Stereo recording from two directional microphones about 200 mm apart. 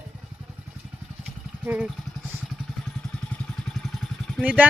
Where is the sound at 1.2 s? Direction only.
5° right (ahead or behind).